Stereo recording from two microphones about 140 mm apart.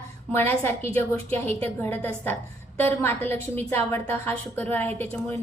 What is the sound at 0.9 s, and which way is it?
A woman's voice, 15° left (ahead or behind).